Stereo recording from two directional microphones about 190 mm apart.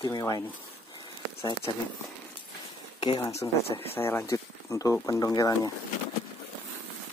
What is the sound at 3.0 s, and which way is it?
Speech, 25° left (ahead or behind).